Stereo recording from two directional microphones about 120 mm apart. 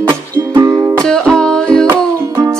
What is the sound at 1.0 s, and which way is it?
Music, 5° left (ahead or behind).